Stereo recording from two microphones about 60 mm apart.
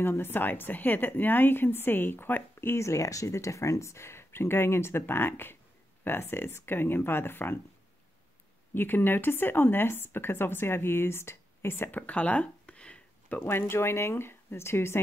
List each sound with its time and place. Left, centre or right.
0.0 s speech: left
2.7 s speech: left
8.7 s speech: left
11.9 s a sound: left
13.4 s speech: left